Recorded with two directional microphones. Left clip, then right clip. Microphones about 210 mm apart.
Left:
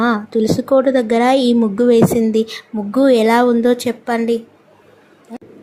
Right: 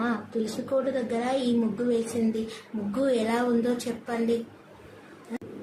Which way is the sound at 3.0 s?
45° left (ahead or behind).